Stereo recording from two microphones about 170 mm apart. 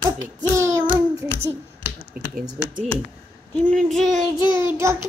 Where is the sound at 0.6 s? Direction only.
15° right (ahead or behind).